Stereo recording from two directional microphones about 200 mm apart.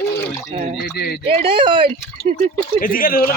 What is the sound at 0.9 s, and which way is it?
Speech, 50° left (ahead or behind).